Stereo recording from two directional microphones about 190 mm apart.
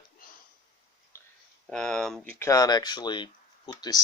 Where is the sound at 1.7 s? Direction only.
5° left (ahead or behind).